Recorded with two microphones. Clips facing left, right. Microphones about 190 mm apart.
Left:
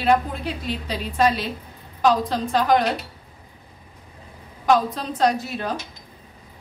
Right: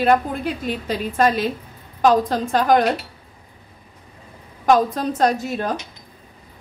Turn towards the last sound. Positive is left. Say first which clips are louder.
# right 2 dB
turn(degrees=-45)  # may be behind; listen again after turning